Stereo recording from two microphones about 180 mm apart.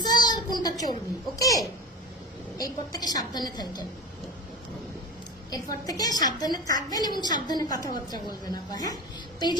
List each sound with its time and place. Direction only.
0.0 s a sound: 20° left (ahead or behind)
1.4 s a woman's voice: 20° left (ahead or behind)
5.5 s a woman's voice: 20° left (ahead or behind)